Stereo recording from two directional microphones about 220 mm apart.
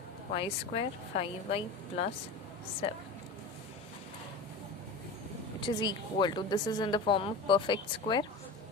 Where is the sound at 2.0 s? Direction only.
25° left (ahead or behind).